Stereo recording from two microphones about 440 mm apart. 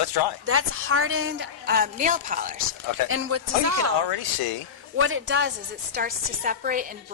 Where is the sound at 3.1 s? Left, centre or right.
Right.